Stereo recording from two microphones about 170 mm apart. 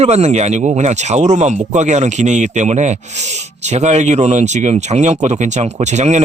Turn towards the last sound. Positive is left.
turn(degrees=-40)  # may be behind; listen again after turning